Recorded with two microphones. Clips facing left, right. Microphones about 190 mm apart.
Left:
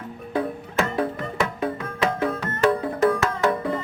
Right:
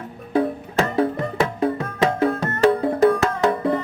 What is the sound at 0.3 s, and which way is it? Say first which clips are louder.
Music: right 4 dB; 30° right (ahead or behind).